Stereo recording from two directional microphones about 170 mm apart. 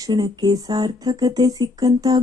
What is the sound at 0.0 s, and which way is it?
Speech, 25° right (ahead or behind).